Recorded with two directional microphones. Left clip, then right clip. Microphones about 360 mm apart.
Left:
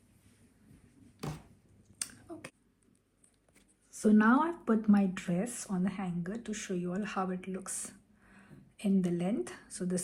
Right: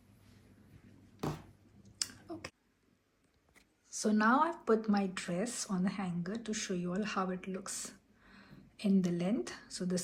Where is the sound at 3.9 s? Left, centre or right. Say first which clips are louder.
Left 3 dB; centre.